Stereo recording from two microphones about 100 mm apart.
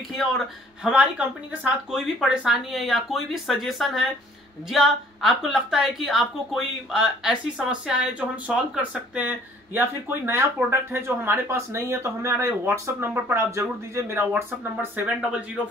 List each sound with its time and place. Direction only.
0.8 s a woman's voice: 10° right (ahead or behind)
14.8 s speech: 15° right (ahead or behind)